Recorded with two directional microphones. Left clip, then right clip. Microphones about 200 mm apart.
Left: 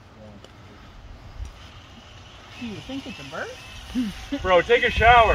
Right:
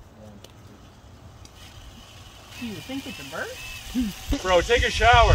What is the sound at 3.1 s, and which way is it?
Speech, 25° left (ahead or behind).